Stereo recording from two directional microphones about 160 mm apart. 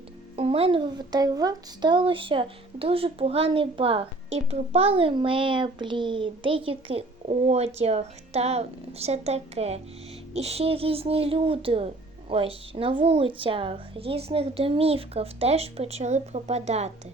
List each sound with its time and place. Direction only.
0.3 s speech: 40° right (ahead or behind)